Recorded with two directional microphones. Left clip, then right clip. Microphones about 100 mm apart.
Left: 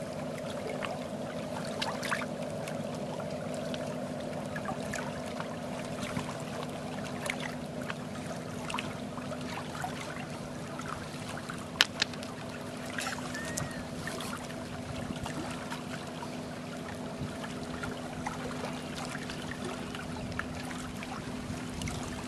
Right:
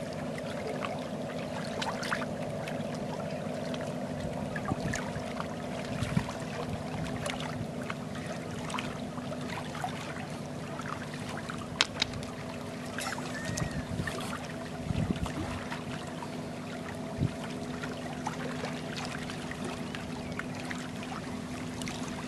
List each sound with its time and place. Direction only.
1.8 s pour: 20° left (ahead or behind)
11.8 s boat: 20° left (ahead or behind)